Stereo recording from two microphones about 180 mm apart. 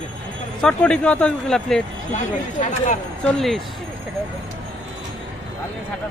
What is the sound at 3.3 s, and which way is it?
Speech, centre (ahead or behind).